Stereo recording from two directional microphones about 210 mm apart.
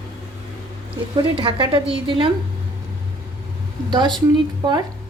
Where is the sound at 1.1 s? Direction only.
20° right (ahead or behind).